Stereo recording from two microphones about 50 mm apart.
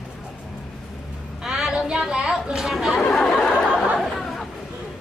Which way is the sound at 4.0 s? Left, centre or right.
Centre.